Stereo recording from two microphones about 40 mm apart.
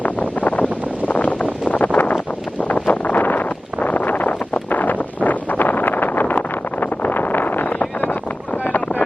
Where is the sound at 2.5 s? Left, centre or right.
Left.